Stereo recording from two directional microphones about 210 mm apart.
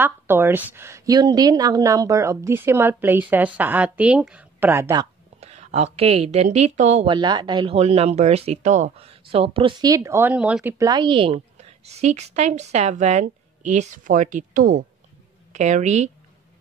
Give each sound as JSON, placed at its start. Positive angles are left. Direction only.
{"t": 0.0, "sound": "a woman's voice", "side_deg": -10}
{"t": 5.4, "sound": "a woman's voice", "side_deg": -30}
{"t": 7.2, "sound": "a woman's voice", "side_deg": -20}